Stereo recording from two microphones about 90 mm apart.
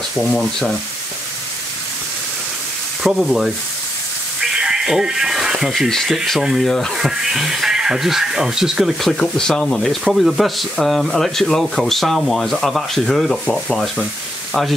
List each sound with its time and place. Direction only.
0.2 s speech: 5° left (ahead or behind)
3.0 s frying: 5° right (ahead or behind)
4.4 s speech: 5° right (ahead or behind)
9.1 s speech: 5° left (ahead or behind)